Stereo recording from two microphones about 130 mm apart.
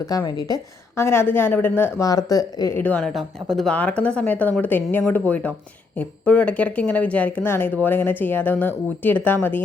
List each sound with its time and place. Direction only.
0.0 s a woman's voice: 25° left (ahead or behind)
2.0 s a woman's voice: 30° left (ahead or behind)
2.7 s speech: 10° left (ahead or behind)
3.5 s speech: centre (ahead or behind)